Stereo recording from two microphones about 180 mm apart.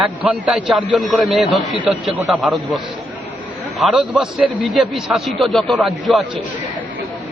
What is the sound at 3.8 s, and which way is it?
A man's voice, 5° right (ahead or behind).